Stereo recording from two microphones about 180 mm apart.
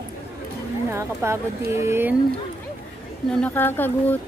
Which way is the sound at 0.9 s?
15° right (ahead or behind).